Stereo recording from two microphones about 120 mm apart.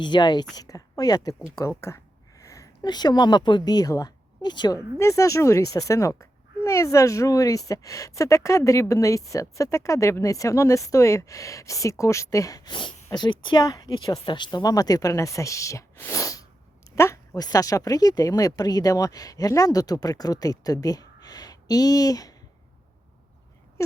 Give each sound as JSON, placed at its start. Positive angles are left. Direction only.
{"t": 0.0, "sound": "a woman's voice", "side_deg": 40}
{"t": 2.4, "sound": "speech", "side_deg": 25}
{"t": 4.9, "sound": "speech", "side_deg": 25}
{"t": 16.0, "sound": "sneeze", "side_deg": 25}
{"t": 16.9, "sound": "speech", "side_deg": 25}